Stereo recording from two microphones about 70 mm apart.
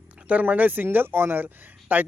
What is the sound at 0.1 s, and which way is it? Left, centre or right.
Speech, centre.